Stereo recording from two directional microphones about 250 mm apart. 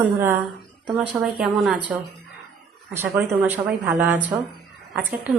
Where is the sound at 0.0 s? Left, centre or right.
Centre.